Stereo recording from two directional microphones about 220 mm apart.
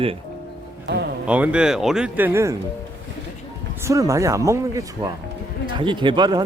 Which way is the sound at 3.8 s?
15° right (ahead or behind).